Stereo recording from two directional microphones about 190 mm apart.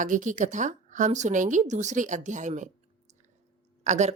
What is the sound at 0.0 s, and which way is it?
A woman's voice, 40° right (ahead or behind).